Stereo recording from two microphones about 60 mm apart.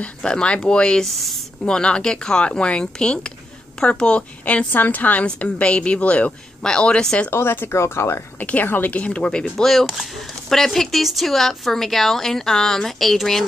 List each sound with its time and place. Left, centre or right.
0.0 s speech: centre
1.6 s speech: centre
4.7 s speech: left
7.2 s speech: left
8.4 s speech: left
9.7 s a woman's voice: centre